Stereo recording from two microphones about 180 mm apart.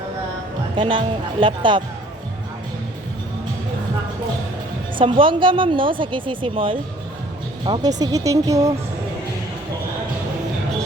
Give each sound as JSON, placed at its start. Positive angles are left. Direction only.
{"t": 0.8, "sound": "a woman's voice", "side_deg": -30}
{"t": 4.9, "sound": "a woman's voice", "side_deg": -30}